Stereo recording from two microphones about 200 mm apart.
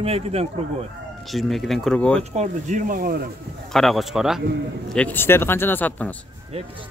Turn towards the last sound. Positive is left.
turn(degrees=-30)  # may be behind; listen again after turning